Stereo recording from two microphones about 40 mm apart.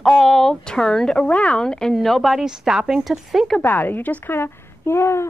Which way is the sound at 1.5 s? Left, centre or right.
Centre.